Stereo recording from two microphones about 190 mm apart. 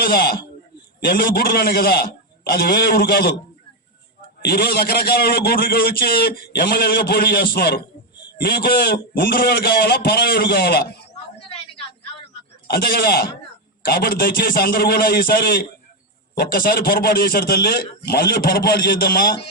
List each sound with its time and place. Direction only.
0.0 s a man's voice: 50° left (ahead or behind)
4.4 s a man's voice: 55° left (ahead or behind)
12.6 s a man's voice: 55° left (ahead or behind)